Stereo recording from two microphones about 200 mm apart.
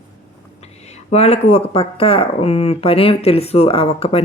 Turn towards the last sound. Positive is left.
turn(degrees=30)  # may be behind; listen again after turning